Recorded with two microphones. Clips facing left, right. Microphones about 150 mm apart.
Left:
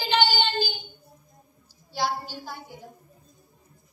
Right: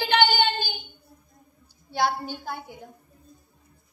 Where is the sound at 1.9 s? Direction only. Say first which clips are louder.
Right 3 dB; 55° right (ahead or behind).